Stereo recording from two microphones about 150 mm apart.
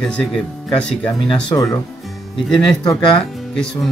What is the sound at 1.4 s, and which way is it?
Speech, 25° left (ahead or behind).